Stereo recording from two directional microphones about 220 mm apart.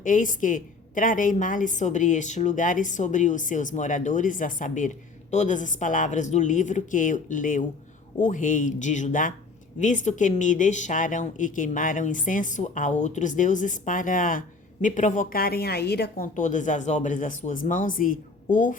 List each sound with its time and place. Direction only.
0.0 s speech: 35° left (ahead or behind)